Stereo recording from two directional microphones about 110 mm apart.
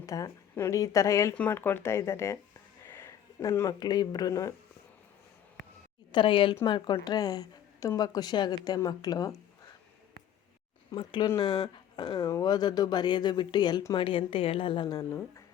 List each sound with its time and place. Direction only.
0.0 s a woman's voice: 30° left (ahead or behind)
1.4 s speech: 15° left (ahead or behind); by 4.5 s 30° left (ahead or behind)
6.1 s a woman's voice: 50° left (ahead or behind)
10.9 s a woman's voice: 45° left (ahead or behind)